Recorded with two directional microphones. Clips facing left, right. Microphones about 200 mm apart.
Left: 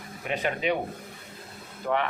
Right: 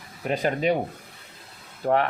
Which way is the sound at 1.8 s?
40° right (ahead or behind).